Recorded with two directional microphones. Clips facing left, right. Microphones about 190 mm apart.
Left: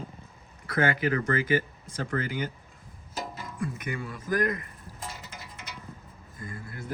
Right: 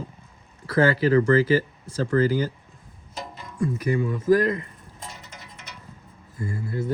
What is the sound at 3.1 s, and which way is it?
Music, 5° left (ahead or behind).